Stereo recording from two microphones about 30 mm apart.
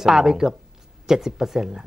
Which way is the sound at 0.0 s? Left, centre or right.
Centre.